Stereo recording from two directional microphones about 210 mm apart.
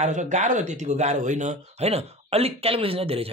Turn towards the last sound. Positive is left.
turn(degrees=-25)  # may be behind; listen again after turning